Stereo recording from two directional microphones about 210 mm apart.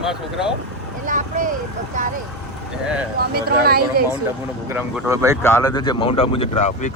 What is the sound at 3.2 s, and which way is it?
Speech, 50° right (ahead or behind).